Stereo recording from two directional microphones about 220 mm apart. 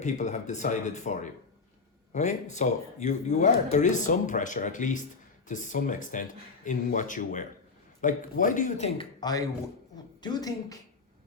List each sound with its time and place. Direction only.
0.0 s speech: 30° left (ahead or behind)
9.0 s a man's voice: 20° left (ahead or behind)